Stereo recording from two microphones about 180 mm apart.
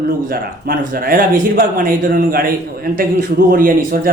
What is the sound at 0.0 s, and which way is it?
A man's voice, 55° right (ahead or behind).